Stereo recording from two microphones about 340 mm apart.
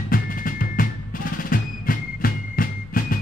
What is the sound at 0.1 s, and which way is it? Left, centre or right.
Drum, left.